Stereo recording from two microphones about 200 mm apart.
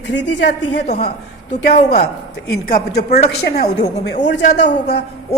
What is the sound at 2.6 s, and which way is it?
Speech, 50° left (ahead or behind).